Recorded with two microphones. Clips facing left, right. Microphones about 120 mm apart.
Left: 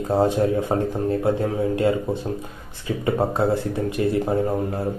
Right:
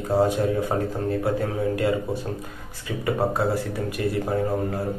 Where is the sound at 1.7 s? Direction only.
25° left (ahead or behind).